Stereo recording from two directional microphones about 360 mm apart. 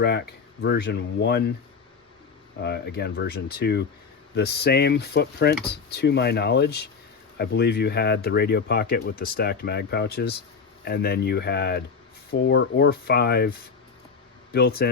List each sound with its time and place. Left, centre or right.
0.6 s speech: left
2.6 s speech: left